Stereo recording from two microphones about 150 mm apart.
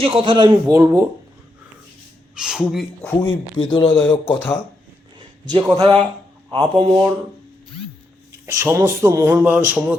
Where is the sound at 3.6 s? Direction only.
35° left (ahead or behind).